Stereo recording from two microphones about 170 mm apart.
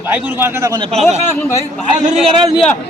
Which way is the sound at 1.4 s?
15° left (ahead or behind).